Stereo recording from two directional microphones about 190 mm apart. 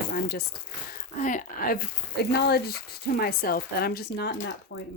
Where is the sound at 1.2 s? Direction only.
45° left (ahead or behind).